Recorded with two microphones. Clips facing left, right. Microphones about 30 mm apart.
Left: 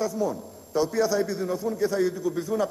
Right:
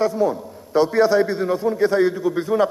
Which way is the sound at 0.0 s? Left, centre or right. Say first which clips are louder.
Right 7 dB; right.